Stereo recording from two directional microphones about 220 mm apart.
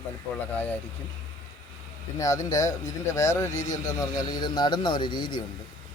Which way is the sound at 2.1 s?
15° left (ahead or behind).